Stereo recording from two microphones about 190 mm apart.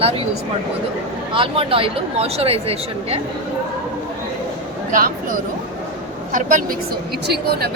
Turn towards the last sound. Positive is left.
turn(degrees=-55)  # may be behind; listen again after turning